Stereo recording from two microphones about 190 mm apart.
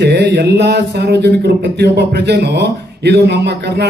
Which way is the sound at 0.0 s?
60° right (ahead or behind).